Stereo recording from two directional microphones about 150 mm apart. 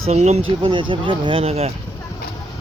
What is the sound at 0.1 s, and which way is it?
Speech, 45° right (ahead or behind).